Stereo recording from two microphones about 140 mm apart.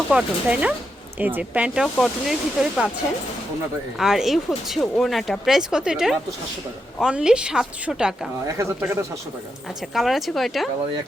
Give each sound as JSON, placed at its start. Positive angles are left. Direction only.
{"t": 0.1, "sound": "speech", "side_deg": -10}
{"t": 3.9, "sound": "speech", "side_deg": -5}
{"t": 8.4, "sound": "speech", "side_deg": -20}
{"t": 9.9, "sound": "speech", "side_deg": 0}